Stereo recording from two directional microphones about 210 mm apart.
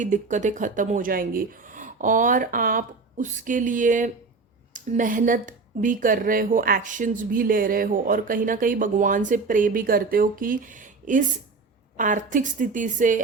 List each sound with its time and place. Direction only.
0.0 s speech: 35° right (ahead or behind)